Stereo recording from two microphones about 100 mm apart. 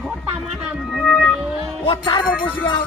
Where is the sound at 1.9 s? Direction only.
50° left (ahead or behind).